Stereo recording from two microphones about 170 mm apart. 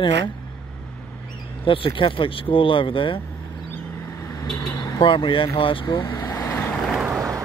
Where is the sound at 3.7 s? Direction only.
20° left (ahead or behind).